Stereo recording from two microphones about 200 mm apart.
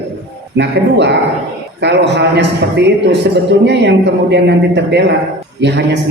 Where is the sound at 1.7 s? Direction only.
60° right (ahead or behind).